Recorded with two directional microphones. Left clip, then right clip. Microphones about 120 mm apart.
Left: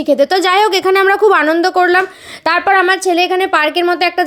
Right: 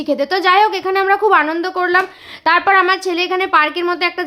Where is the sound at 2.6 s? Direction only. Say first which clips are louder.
Left 2 dB; 30° left (ahead or behind).